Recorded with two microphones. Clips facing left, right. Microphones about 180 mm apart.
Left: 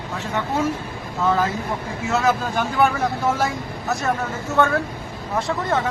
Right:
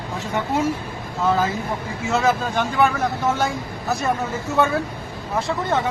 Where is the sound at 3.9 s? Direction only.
Centre (ahead or behind).